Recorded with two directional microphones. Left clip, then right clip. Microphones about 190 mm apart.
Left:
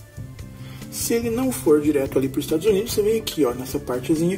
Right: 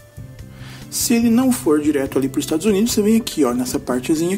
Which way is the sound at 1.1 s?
25° right (ahead or behind).